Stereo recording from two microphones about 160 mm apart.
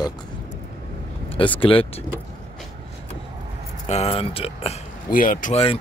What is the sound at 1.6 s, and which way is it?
Speech, 35° left (ahead or behind).